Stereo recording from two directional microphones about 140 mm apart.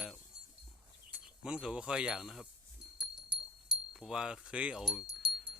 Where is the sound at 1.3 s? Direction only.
5° right (ahead or behind).